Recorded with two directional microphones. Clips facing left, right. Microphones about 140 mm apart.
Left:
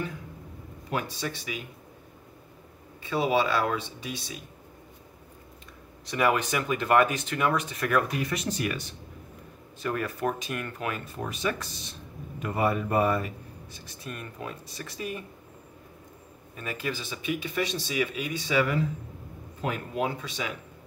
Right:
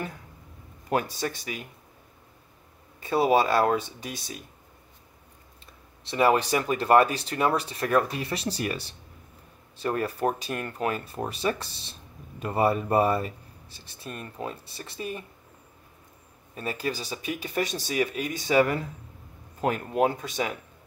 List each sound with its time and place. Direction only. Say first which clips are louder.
0.8 s speech: right 4 dB; 45° right (ahead or behind)
3.0 s speech: right 3 dB; 45° right (ahead or behind)
6.0 s speech: right 3 dB; 30° right (ahead or behind)
16.5 s speech: right 3 dB; 35° right (ahead or behind)